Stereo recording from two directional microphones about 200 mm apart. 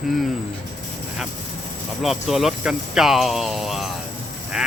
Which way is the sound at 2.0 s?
Centre (ahead or behind).